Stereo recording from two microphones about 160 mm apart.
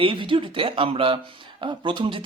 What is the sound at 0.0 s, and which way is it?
Speech, 30° right (ahead or behind).